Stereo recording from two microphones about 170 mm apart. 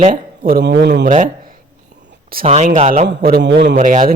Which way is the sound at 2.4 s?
40° right (ahead or behind).